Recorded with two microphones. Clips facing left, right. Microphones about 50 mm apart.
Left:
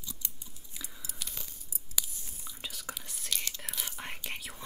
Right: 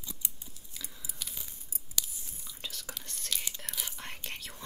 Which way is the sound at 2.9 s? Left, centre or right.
Centre.